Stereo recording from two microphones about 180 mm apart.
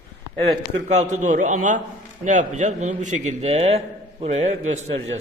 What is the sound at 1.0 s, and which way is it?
A man's voice, 40° right (ahead or behind).